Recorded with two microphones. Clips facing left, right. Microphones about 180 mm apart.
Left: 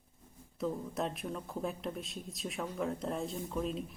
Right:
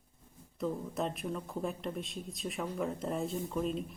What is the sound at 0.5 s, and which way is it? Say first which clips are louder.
Speech: right 1 dB; centre (ahead or behind).